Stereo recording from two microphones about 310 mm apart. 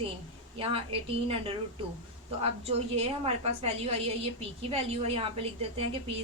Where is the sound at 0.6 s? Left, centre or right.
Centre.